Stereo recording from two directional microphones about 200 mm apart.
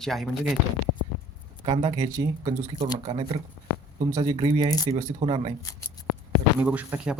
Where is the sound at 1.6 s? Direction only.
25° right (ahead or behind).